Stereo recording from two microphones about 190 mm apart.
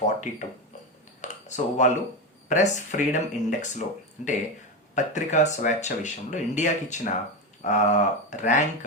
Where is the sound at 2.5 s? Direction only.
40° left (ahead or behind).